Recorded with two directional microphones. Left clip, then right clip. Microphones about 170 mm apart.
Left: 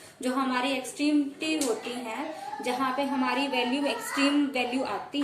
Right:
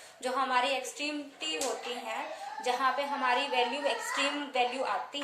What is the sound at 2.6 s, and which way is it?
A woman's voice, 20° right (ahead or behind).